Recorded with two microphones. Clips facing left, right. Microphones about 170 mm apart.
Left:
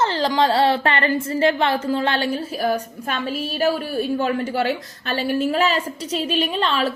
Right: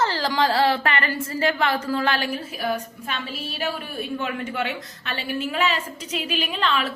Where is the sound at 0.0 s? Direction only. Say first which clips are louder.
Left 3 dB; 25° left (ahead or behind).